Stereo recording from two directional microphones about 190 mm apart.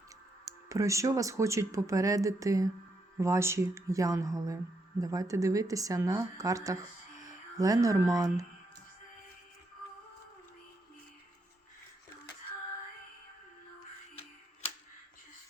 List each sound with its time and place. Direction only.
0.7 s speech: 15° right (ahead or behind)